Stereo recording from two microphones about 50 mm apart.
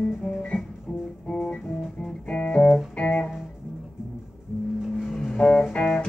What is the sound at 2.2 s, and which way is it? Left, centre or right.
Music, left.